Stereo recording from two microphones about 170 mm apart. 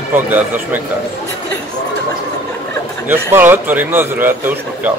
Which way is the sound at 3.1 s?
10° right (ahead or behind).